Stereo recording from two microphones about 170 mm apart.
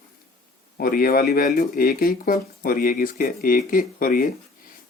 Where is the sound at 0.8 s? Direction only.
60° left (ahead or behind).